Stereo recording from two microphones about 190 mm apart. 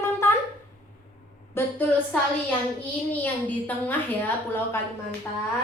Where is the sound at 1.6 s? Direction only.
10° left (ahead or behind).